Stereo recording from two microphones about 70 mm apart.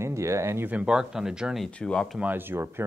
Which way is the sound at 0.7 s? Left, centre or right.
Right.